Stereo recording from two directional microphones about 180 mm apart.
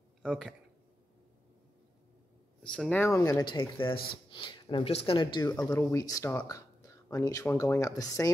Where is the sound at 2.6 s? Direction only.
5° left (ahead or behind).